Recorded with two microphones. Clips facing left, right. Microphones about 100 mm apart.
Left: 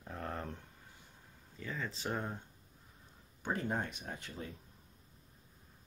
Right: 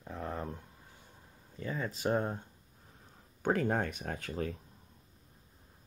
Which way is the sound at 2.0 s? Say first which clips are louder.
Right 8 dB; 35° right (ahead or behind).